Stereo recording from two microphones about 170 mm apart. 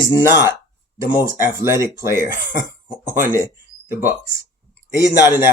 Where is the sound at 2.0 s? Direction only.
55° left (ahead or behind).